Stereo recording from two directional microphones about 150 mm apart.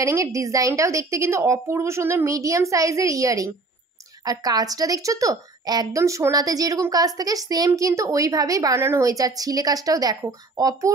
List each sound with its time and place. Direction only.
0.0 s a woman's voice: 20° right (ahead or behind)